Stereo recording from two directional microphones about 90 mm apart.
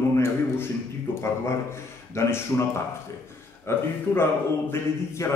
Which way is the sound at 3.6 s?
25° left (ahead or behind).